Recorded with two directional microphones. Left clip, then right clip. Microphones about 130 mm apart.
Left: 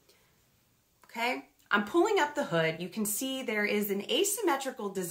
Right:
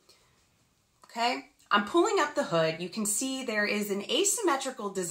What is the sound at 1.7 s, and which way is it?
Speech, 45° left (ahead or behind).